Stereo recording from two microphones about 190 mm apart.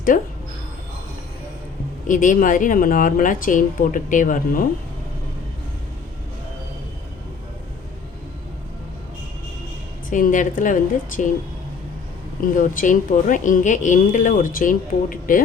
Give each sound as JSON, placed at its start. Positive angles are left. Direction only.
{"t": 0.1, "sound": "speech", "side_deg": 40}
{"t": 2.0, "sound": "speech", "side_deg": 45}
{"t": 10.1, "sound": "speech", "side_deg": 45}
{"t": 12.5, "sound": "speech", "side_deg": 45}